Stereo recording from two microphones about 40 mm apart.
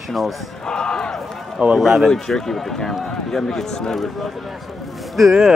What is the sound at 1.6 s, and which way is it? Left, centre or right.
Speech, right.